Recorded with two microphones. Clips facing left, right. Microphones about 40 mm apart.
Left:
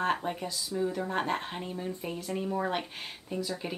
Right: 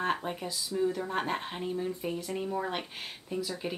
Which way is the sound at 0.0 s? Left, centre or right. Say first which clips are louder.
Left 2 dB; centre.